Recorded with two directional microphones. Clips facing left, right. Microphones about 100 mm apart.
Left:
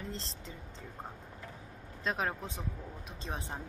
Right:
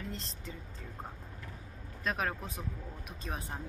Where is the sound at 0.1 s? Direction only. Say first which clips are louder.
Left 1 dB; 30° left (ahead or behind).